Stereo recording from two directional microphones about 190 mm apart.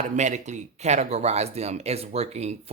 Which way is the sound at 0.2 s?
40° right (ahead or behind).